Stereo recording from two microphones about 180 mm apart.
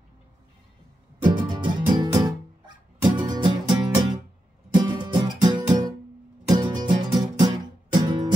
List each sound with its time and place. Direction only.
1.2 s music: 25° right (ahead or behind)